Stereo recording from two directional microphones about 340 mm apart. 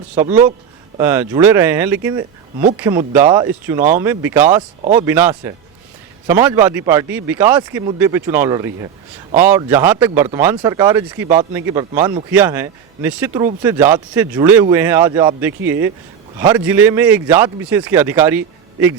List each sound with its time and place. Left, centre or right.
0.2 s speech: centre
4.8 s speech: right
5.0 s speech: centre